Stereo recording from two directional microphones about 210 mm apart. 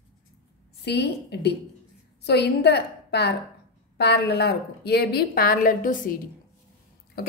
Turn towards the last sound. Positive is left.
turn(degrees=50)  # may be behind; listen again after turning